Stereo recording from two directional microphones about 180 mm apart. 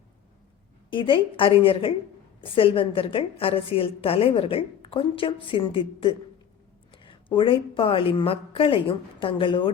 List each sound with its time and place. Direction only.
0.9 s a woman's voice: 30° left (ahead or behind)